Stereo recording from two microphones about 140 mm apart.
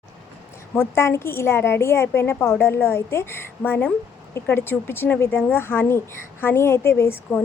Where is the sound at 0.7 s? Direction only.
20° left (ahead or behind).